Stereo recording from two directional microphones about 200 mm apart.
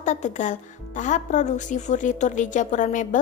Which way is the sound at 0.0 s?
35° left (ahead or behind).